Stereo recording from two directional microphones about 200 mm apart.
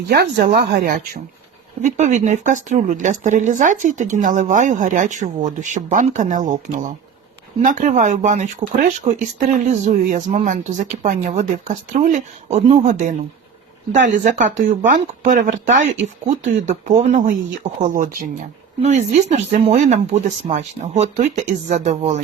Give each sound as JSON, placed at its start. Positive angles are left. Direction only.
{"t": 0.1, "sound": "speech", "side_deg": -50}
{"t": 1.8, "sound": "speech", "side_deg": -40}